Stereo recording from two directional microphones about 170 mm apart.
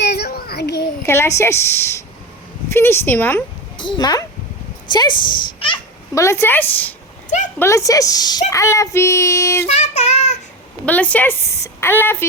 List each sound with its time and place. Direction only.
0.0 s child singing: 75° left (ahead or behind)
1.0 s speech: 15° left (ahead or behind)
3.8 s speech: 25° left (ahead or behind)
5.5 s babbling: 30° left (ahead or behind)
6.1 s speech: 15° left (ahead or behind)
7.3 s a sound: 45° left (ahead or behind)
7.6 s speech: 20° left (ahead or behind)
9.6 s child singing: 40° left (ahead or behind)
10.8 s speech: 10° left (ahead or behind)